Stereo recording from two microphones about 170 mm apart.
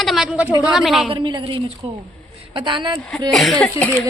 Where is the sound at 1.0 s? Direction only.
30° right (ahead or behind).